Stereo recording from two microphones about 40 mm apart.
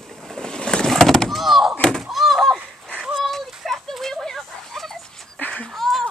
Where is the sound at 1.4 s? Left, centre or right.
Centre.